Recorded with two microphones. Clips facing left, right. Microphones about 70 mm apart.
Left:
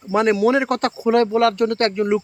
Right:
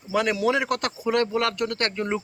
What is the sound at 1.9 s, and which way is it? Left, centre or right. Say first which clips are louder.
Speech: left 8 dB; centre.